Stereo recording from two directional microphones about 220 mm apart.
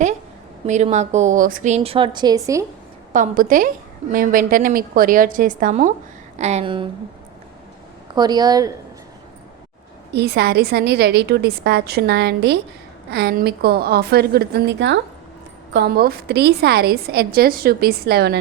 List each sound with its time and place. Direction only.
0.7 s a woman's voice: 30° right (ahead or behind); by 2.6 s 15° right (ahead or behind)
3.1 s a woman's voice: 35° right (ahead or behind)
8.1 s a woman's voice: 20° right (ahead or behind)
10.1 s a woman's voice: 50° right (ahead or behind)